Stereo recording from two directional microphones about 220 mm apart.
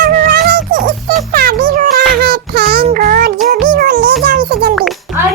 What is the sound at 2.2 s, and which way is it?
Child singing, 45° right (ahead or behind).